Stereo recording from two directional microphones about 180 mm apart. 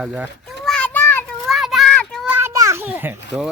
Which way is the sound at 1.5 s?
Centre (ahead or behind).